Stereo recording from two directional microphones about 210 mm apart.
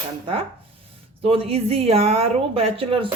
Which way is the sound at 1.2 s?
25° right (ahead or behind).